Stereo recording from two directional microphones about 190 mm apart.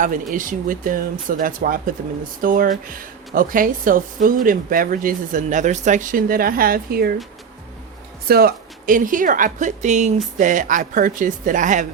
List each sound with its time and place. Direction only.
0.3 s speech: 45° right (ahead or behind)
8.3 s speech: 55° right (ahead or behind)